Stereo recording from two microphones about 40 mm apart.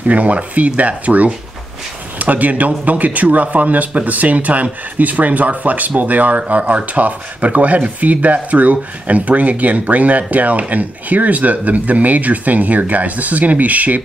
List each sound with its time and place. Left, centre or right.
0.0 s speech: right